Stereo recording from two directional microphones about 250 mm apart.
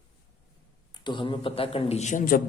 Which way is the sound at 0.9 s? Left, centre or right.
Centre.